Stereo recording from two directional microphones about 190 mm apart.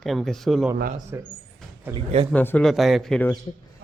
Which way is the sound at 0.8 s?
45° right (ahead or behind).